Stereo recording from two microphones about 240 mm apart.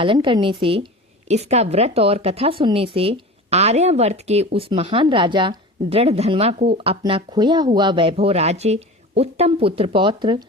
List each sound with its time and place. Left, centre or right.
0.0 s speech: right